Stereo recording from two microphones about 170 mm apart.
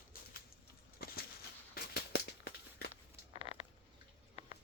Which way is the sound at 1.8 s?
70° left (ahead or behind).